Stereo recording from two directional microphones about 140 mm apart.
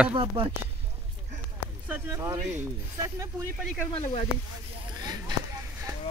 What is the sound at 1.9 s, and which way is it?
A man's voice, 20° right (ahead or behind).